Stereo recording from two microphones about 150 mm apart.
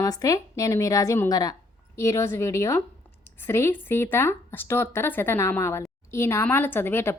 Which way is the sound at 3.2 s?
15° left (ahead or behind).